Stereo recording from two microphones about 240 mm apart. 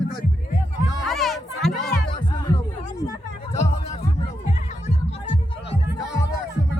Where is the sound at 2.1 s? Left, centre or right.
Centre.